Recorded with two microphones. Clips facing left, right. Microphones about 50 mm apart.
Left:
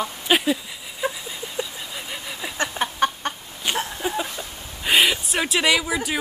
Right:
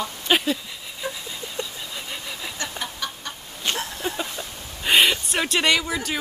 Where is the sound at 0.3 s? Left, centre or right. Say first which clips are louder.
Left 1 dB; centre.